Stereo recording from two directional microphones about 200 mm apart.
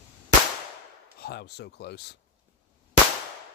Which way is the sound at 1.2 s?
55° left (ahead or behind).